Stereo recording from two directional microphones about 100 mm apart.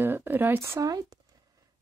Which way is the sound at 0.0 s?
20° right (ahead or behind).